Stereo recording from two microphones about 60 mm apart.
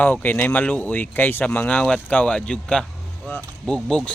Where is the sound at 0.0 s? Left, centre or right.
Left.